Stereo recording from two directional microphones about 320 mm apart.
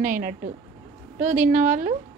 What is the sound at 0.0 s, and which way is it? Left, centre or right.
Speech, right.